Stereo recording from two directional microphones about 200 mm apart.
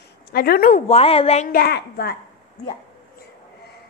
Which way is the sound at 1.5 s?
50° left (ahead or behind).